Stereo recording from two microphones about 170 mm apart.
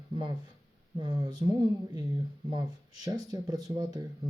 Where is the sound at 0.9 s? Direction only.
30° right (ahead or behind).